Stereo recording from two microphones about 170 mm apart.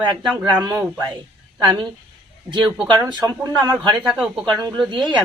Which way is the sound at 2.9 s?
25° right (ahead or behind).